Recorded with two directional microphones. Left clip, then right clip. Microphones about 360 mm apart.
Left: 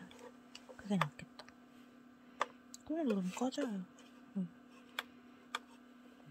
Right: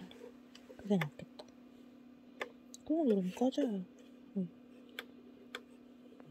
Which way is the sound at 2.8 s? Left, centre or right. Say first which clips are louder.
Right 5 dB; centre.